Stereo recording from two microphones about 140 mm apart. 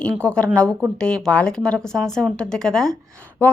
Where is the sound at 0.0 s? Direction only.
10° left (ahead or behind).